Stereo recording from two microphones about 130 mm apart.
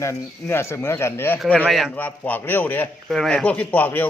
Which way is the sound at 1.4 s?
5° left (ahead or behind).